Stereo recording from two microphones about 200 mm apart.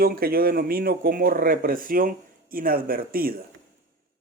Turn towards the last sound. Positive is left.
turn(degrees=-45)  # may be behind; listen again after turning